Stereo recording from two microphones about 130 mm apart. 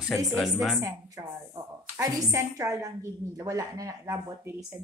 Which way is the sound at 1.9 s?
25° right (ahead or behind).